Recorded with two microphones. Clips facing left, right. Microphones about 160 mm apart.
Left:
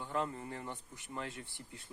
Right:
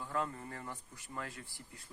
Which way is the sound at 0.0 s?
20° left (ahead or behind).